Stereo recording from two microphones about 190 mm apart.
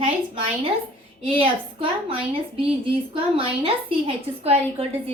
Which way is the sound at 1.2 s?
30° right (ahead or behind).